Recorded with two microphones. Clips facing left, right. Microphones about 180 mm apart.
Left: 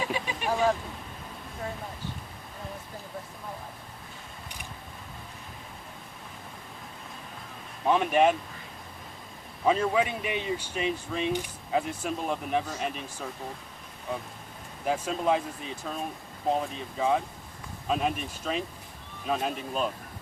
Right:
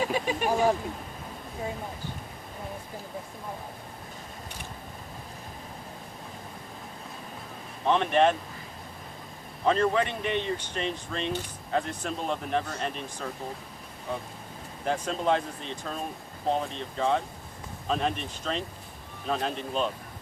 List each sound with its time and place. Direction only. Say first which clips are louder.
0.0 s vehicle: right 4 dB; 45° right (ahead or behind)
7.9 s speech: even; 5° left (ahead or behind)
9.6 s speech: even; 5° left (ahead or behind)
14.8 s speech: even; 5° left (ahead or behind)